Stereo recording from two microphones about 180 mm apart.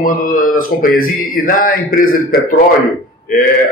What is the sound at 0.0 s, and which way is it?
Speech, 50° left (ahead or behind).